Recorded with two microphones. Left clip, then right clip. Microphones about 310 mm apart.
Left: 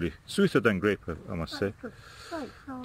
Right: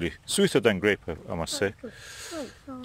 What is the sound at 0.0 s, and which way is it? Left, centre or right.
Speech, right.